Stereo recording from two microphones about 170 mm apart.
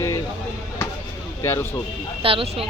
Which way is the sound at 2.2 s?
35° right (ahead or behind).